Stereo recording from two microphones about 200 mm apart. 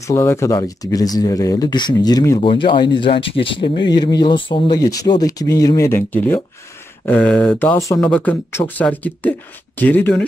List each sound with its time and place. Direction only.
0.0 s speech: 15° left (ahead or behind)